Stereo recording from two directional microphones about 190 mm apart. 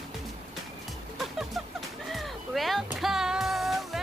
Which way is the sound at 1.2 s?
Centre (ahead or behind).